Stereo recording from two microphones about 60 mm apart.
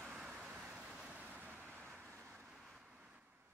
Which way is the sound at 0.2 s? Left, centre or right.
Centre.